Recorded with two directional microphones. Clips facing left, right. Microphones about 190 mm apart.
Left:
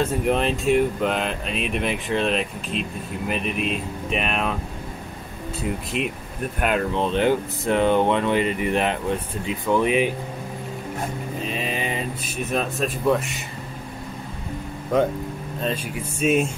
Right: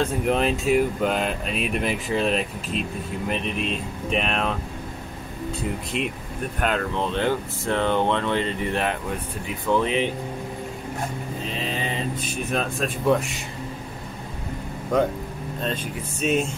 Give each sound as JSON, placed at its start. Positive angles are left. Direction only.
{"t": 0.0, "sound": "speech", "side_deg": 0}
{"t": 5.9, "sound": "speech", "side_deg": 0}
{"t": 6.6, "sound": "speech", "side_deg": 15}
{"t": 11.5, "sound": "mantra", "side_deg": 15}
{"t": 12.4, "sound": "speech", "side_deg": 0}
{"t": 14.9, "sound": "speech", "side_deg": 5}